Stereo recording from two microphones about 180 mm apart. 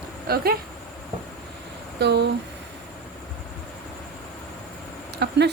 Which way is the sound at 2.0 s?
70° right (ahead or behind).